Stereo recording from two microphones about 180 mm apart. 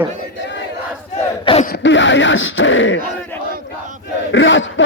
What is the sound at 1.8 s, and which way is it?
Speech, 90° left.